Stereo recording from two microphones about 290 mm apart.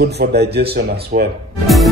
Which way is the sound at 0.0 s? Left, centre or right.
Right.